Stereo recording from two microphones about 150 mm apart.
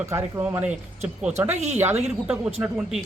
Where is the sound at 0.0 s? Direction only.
20° right (ahead or behind).